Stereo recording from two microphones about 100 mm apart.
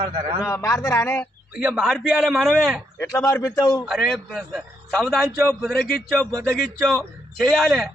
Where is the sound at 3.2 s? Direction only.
35° left (ahead or behind).